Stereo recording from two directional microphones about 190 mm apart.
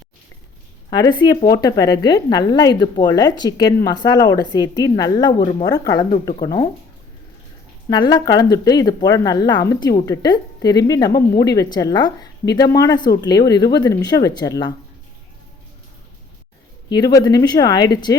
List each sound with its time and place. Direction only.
0.9 s a woman's voice: 20° left (ahead or behind)
7.9 s a woman's voice: 20° left (ahead or behind)
16.9 s a woman's voice: 20° left (ahead or behind)